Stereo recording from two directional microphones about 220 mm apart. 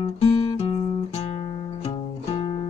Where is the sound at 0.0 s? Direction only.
25° left (ahead or behind).